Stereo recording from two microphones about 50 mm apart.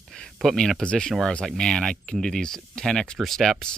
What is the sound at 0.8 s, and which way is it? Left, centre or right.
Speech, left.